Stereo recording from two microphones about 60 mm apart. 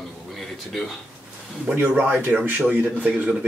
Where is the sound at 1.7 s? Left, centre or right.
Right.